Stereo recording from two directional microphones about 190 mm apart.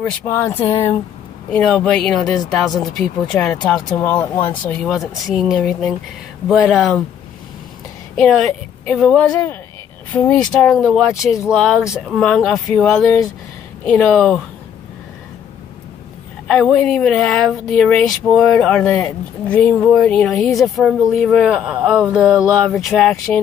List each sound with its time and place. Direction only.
0.0 s speech: 10° left (ahead or behind)
8.2 s speech: centre (ahead or behind)
9.3 s speech: 15° left (ahead or behind)
10.1 s speech: 5° left (ahead or behind)
16.4 s speech: 5° left (ahead or behind)